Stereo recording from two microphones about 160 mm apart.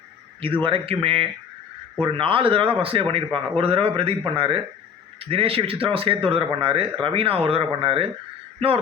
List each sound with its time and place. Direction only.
0.6 s speech: 35° right (ahead or behind)